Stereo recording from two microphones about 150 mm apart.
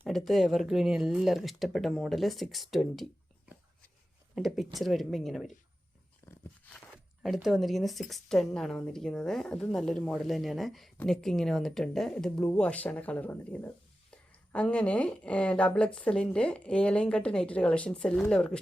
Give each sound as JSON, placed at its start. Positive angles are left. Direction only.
{"t": 0.0, "sound": "a woman's voice", "side_deg": 0}
{"t": 4.4, "sound": "a woman's voice", "side_deg": 0}
{"t": 6.2, "sound": "a sound", "side_deg": 20}
{"t": 6.9, "sound": "zipper", "side_deg": 0}
{"t": 7.4, "sound": "a woman's voice", "side_deg": 0}